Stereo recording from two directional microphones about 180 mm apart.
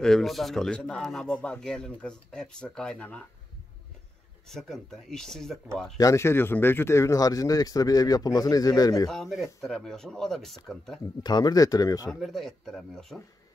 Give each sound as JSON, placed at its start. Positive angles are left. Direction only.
{"t": 0.0, "sound": "a man's voice", "side_deg": 0}
{"t": 4.5, "sound": "a man's voice", "side_deg": 0}
{"t": 5.9, "sound": "speech", "side_deg": 15}
{"t": 9.1, "sound": "a man's voice", "side_deg": 0}
{"t": 11.2, "sound": "speech", "side_deg": 20}
{"t": 12.1, "sound": "a man's voice", "side_deg": 0}